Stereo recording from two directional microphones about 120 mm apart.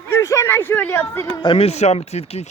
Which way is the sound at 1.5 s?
65° left (ahead or behind).